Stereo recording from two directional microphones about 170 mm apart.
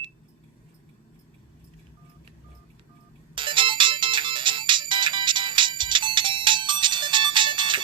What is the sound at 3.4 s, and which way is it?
Ringtone, 30° right (ahead or behind).